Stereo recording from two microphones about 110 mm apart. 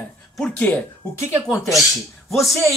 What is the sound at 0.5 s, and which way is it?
Speech, 15° left (ahead or behind).